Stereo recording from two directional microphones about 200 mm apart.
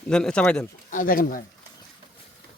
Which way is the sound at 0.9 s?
45° left (ahead or behind).